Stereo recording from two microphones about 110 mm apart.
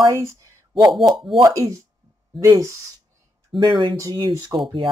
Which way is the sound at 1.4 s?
30° right (ahead or behind).